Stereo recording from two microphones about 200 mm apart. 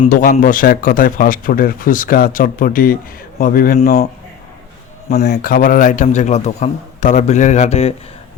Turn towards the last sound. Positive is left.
turn(degrees=35)  # may be behind; listen again after turning